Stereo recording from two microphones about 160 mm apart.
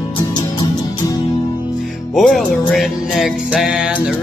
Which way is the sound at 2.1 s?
Centre (ahead or behind).